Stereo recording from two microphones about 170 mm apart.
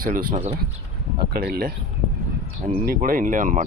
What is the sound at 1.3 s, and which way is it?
Speech, 65° right (ahead or behind).